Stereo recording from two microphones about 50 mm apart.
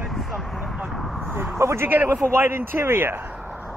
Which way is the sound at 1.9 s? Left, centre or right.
Right.